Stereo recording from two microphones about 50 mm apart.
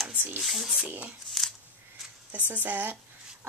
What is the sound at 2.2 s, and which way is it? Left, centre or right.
Speech, right.